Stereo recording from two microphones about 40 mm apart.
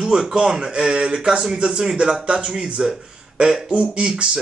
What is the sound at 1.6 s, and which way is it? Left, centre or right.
Speech, centre.